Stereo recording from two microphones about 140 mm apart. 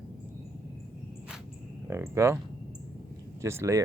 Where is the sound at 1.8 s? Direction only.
20° right (ahead or behind).